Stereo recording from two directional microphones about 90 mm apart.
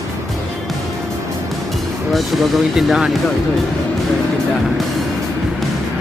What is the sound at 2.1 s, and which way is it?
Speech, centre (ahead or behind).